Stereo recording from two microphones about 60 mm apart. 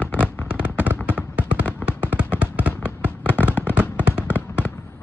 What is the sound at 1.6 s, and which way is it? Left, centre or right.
Fireworks, left.